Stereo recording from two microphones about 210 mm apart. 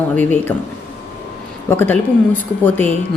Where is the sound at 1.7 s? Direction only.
10° left (ahead or behind).